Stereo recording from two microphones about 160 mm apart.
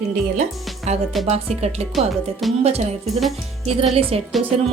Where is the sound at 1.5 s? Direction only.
40° right (ahead or behind).